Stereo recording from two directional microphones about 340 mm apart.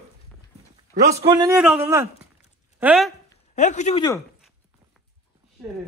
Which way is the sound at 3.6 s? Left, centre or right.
Left.